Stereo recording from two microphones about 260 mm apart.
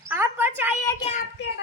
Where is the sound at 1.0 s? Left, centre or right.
Left.